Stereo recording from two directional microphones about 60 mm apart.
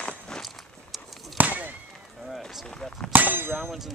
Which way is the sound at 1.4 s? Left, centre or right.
Right.